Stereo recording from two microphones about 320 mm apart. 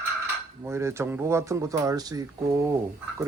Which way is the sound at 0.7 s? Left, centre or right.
Centre.